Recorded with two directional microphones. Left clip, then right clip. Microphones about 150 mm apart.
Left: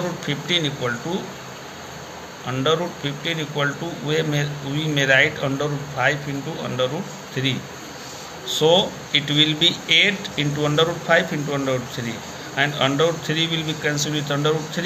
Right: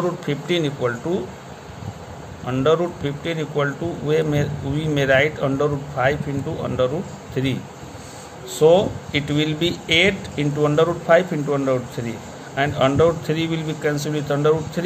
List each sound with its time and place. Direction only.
0.3 s speech: 65° right (ahead or behind)
2.4 s speech: 55° right (ahead or behind)
7.4 s speech: 65° right (ahead or behind)